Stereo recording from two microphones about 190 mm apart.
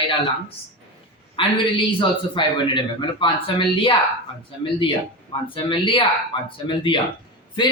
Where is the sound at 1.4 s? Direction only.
25° left (ahead or behind).